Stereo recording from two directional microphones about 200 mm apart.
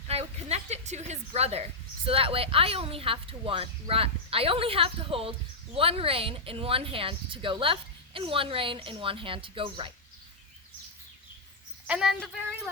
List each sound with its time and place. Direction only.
0.1 s a sound: 30° right (ahead or behind)
2.0 s speech: 30° right (ahead or behind)
11.9 s speech: centre (ahead or behind)